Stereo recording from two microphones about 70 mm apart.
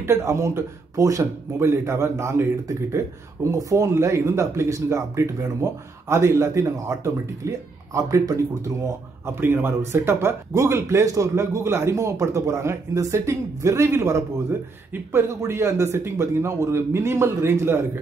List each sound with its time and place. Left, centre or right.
0.0 s speech: right
3.4 s speech: right
9.2 s speech: right